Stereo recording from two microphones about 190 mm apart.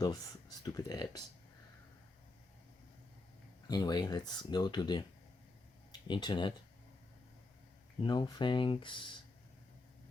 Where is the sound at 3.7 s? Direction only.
20° left (ahead or behind).